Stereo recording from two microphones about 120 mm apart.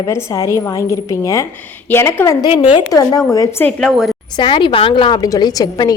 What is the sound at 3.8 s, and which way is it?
Speech, centre (ahead or behind).